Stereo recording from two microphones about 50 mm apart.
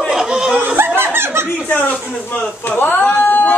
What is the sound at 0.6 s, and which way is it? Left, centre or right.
Snicker, right.